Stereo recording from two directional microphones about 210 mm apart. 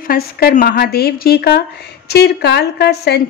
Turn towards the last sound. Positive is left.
turn(degrees=50)  # may be behind; listen again after turning